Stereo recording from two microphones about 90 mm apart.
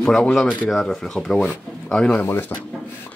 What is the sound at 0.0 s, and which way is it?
Speech, 5° left (ahead or behind).